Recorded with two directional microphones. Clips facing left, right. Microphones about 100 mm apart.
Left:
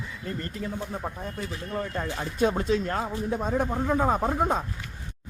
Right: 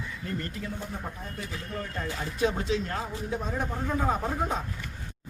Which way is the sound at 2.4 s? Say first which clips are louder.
Left 4 dB; 45° left (ahead or behind).